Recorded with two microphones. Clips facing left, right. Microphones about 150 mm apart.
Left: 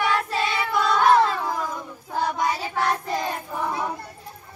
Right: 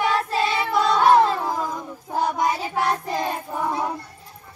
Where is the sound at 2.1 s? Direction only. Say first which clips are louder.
Right 2 dB; 20° right (ahead or behind).